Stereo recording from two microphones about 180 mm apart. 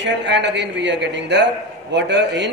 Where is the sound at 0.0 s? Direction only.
75° right (ahead or behind).